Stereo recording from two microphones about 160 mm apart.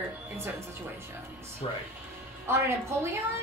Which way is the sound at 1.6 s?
35° left (ahead or behind).